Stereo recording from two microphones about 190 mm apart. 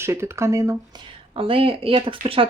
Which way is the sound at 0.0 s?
15° right (ahead or behind).